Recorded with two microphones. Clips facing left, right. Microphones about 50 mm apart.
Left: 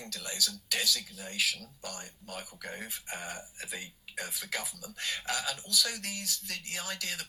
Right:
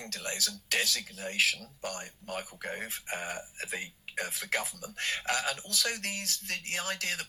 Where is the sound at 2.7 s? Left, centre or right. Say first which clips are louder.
Right 3 dB; right.